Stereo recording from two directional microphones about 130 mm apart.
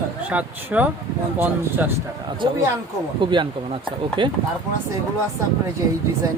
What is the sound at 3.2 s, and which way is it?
Speech, 35° right (ahead or behind).